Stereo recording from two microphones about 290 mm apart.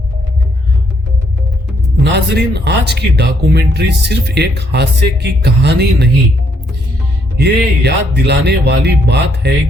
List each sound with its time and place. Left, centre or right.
2.1 s speech: right
7.3 s speech: right